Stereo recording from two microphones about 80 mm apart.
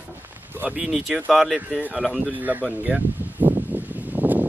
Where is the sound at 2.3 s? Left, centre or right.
Right.